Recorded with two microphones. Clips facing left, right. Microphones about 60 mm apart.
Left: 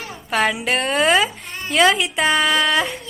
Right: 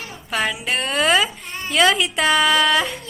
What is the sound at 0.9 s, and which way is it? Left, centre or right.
A woman's voice, left.